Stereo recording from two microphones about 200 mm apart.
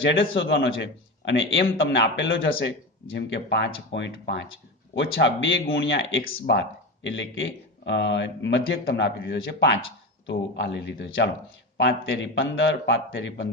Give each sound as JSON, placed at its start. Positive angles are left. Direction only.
{"t": 0.0, "sound": "a man's voice", "side_deg": 70}
{"t": 6.2, "sound": "speech", "side_deg": 50}
{"t": 7.0, "sound": "a man's voice", "side_deg": 70}